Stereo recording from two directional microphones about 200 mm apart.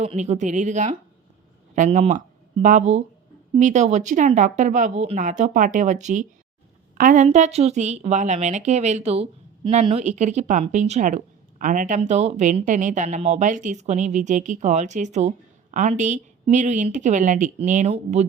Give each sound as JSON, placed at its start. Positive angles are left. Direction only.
{"t": 0.0, "sound": "a woman's voice", "side_deg": -30}